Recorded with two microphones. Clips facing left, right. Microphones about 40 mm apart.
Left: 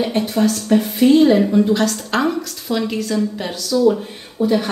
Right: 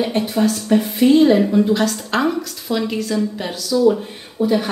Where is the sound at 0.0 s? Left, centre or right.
Centre.